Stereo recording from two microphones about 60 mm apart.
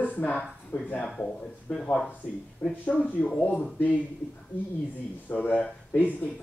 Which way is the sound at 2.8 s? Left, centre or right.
Left.